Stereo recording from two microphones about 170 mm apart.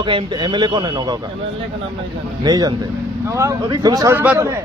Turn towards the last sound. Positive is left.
turn(degrees=-15)  # may be behind; listen again after turning